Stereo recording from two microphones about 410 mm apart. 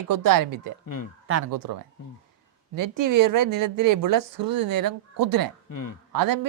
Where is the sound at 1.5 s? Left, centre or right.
Right.